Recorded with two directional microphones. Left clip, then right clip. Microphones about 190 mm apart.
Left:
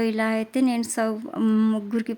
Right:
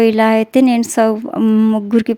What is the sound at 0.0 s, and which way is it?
Speech, 35° right (ahead or behind).